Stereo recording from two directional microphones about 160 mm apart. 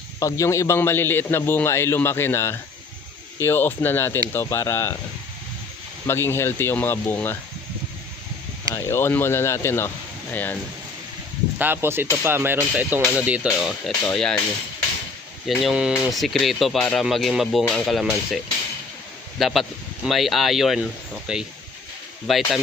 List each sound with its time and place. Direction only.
0.2 s a man's voice: 20° left (ahead or behind)
6.1 s a man's voice: 15° left (ahead or behind)
8.7 s a man's voice: 15° left (ahead or behind)
11.5 s speech: 10° right (ahead or behind); by 14.3 s 5° left (ahead or behind)
15.4 s speech: 5° right (ahead or behind)
19.4 s speech: centre (ahead or behind)